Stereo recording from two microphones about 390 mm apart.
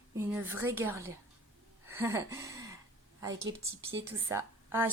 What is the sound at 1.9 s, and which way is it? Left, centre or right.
Gasp, centre.